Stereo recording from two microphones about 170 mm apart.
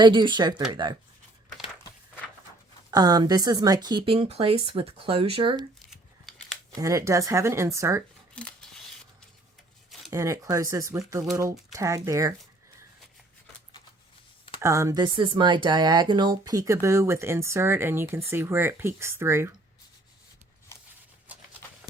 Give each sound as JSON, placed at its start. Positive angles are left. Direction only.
{"t": 0.0, "sound": "speech", "side_deg": -25}
{"t": 2.9, "sound": "speech", "side_deg": -25}
{"t": 5.9, "sound": "scissors", "side_deg": 0}
{"t": 6.7, "sound": "speech", "side_deg": -20}
{"t": 8.4, "sound": "scissors", "side_deg": 5}
{"t": 10.1, "sound": "speech", "side_deg": -15}
{"t": 14.6, "sound": "speech", "side_deg": -15}
{"t": 20.7, "sound": "a sound", "side_deg": 15}